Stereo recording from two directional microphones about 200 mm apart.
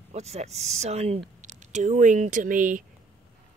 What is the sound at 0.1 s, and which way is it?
Speech, 35° right (ahead or behind).